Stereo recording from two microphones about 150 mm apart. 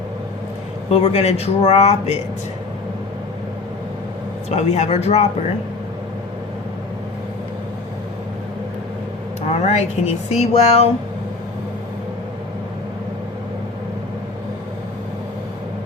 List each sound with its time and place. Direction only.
0.9 s speech: 45° left (ahead or behind)
4.4 s speech: 50° left (ahead or behind)
9.5 s speech: 45° left (ahead or behind)